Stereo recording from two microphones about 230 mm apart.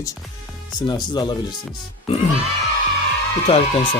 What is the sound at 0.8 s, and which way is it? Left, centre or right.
Speech, centre.